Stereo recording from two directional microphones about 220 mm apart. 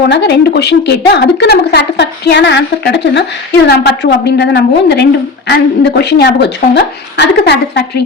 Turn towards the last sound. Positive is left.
turn(degrees=50)  # may be behind; listen again after turning